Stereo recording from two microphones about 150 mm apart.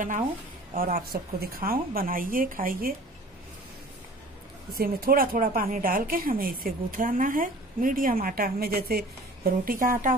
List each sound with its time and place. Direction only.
0.7 s speech: 70° right (ahead or behind)
4.7 s speech: 80° right